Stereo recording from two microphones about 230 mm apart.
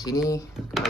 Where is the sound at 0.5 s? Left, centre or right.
Centre.